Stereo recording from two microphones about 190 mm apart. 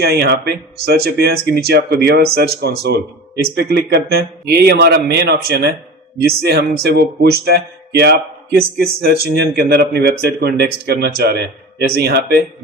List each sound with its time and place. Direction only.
0.0 s speech: 55° right (ahead or behind)